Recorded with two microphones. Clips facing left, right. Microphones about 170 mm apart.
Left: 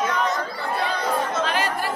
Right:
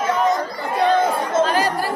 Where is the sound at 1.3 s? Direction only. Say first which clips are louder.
Right 6 dB; 35° right (ahead or behind).